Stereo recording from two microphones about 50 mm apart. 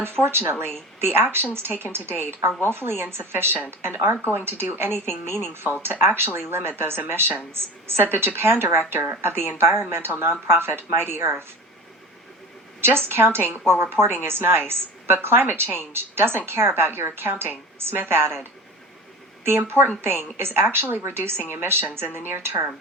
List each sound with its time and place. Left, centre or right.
0.0 s a woman's voice: right
12.8 s speech: right
19.5 s speech: right